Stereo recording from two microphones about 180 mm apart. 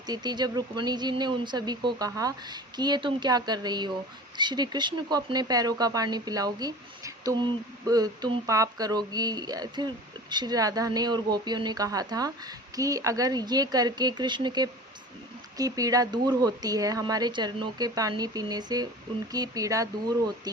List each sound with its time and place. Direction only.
0.1 s speech: 25° right (ahead or behind)